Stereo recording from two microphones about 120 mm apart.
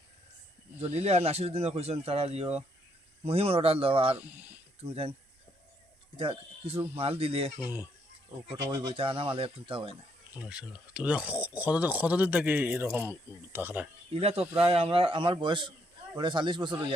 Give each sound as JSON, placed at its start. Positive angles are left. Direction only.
{"t": 0.8, "sound": "speech", "side_deg": -60}
{"t": 4.2, "sound": "speech", "side_deg": -15}
{"t": 4.9, "sound": "speech", "side_deg": -50}
{"t": 6.1, "sound": "speech", "side_deg": -50}
{"t": 7.6, "sound": "speech", "side_deg": -15}
{"t": 8.7, "sound": "speech", "side_deg": -50}
{"t": 10.3, "sound": "speech", "side_deg": -10}
{"t": 14.1, "sound": "speech", "side_deg": -55}